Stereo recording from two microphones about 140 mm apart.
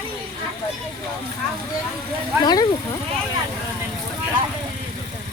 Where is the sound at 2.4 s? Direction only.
30° left (ahead or behind).